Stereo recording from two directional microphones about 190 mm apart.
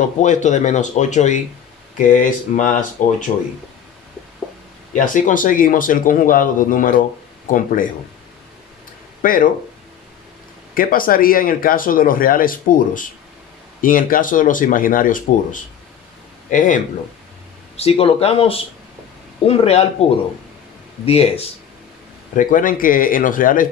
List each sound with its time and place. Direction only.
0.2 s speech: 40° left (ahead or behind)
4.9 s speech: 40° left (ahead or behind)
9.2 s speech: 45° left (ahead or behind)
10.7 s speech: 50° left (ahead or behind)
17.7 s speech: 30° left (ahead or behind)
22.3 s speech: 45° left (ahead or behind)